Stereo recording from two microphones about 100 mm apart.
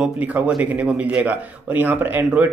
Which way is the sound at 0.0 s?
10° right (ahead or behind).